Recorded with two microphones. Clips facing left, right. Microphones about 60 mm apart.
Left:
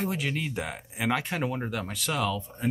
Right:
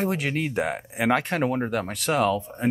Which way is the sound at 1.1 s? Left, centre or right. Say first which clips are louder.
Right 6 dB; centre.